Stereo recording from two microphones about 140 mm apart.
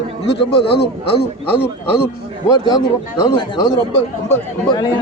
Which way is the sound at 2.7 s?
30° left (ahead or behind).